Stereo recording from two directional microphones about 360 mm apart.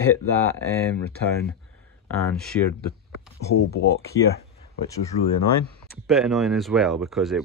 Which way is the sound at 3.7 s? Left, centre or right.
Left.